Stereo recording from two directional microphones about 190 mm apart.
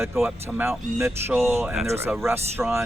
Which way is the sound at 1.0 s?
15° right (ahead or behind).